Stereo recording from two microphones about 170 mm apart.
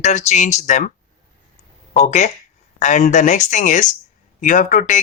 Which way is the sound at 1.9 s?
45° left (ahead or behind).